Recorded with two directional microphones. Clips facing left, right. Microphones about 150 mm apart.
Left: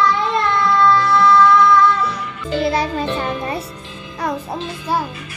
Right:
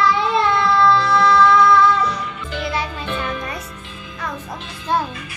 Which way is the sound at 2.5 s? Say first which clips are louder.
Left 7 dB; 35° left (ahead or behind).